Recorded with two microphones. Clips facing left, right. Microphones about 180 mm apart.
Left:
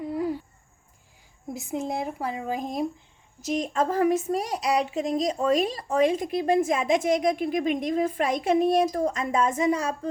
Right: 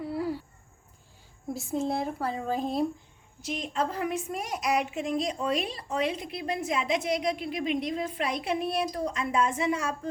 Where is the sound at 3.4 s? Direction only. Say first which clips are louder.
Left 5 dB; 40° left (ahead or behind).